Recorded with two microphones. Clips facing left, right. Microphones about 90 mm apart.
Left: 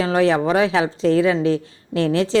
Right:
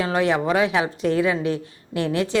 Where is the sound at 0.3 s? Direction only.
30° left (ahead or behind).